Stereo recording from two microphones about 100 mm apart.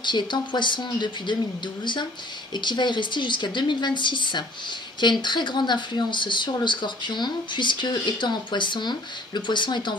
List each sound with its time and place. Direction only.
0.0 s speech: 50° left (ahead or behind)
2.5 s speech: 50° left (ahead or behind)